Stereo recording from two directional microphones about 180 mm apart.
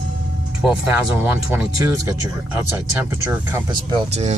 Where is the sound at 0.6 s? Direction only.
5° right (ahead or behind).